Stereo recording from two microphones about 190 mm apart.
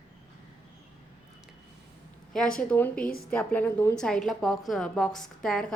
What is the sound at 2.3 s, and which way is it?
A woman's voice, 5° left (ahead or behind).